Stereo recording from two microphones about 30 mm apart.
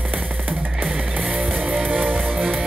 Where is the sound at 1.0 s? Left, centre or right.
Right.